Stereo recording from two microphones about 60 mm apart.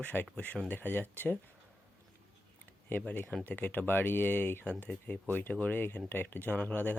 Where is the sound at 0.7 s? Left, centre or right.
Left.